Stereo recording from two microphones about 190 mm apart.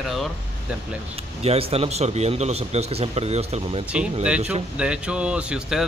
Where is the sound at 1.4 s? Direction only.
30° right (ahead or behind).